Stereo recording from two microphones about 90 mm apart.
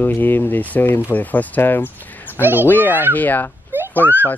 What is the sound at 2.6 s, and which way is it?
Speech, 20° left (ahead or behind).